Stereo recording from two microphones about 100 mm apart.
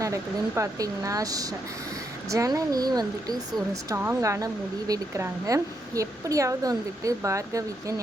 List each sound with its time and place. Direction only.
0.0 s a woman's voice: 30° right (ahead or behind)
3.9 s speech: 20° right (ahead or behind)
4.2 s a woman's voice: 35° right (ahead or behind)